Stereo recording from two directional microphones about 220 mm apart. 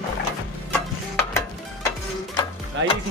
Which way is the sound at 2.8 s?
55° right (ahead or behind).